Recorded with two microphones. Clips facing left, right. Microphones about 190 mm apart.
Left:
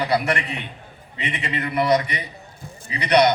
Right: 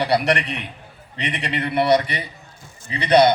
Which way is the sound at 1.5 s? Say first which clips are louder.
Right 2 dB; 30° right (ahead or behind).